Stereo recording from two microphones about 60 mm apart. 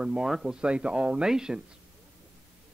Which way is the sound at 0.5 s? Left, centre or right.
Centre.